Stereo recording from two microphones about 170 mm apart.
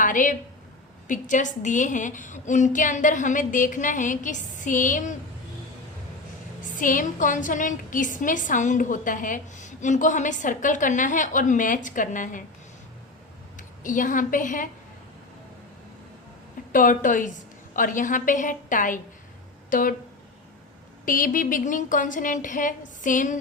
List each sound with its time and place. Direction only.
0.0 s a sound: 50° left (ahead or behind)
1.0 s a woman's voice: 50° left (ahead or behind)
6.7 s a woman's voice: 50° left (ahead or behind)
13.6 s a woman's voice: 50° left (ahead or behind)
16.7 s a woman's voice: 50° left (ahead or behind)
21.0 s a woman's voice: 55° left (ahead or behind)